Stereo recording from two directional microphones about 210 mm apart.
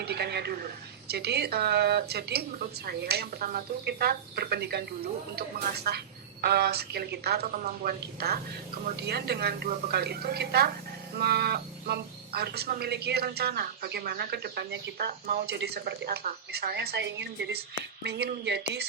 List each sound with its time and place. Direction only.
0.0 s speech: 50° right (ahead or behind)